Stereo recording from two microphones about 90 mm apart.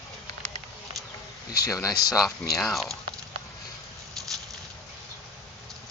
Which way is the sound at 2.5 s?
Centre (ahead or behind).